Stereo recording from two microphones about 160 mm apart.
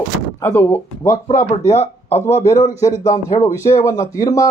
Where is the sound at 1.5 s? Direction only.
40° left (ahead or behind).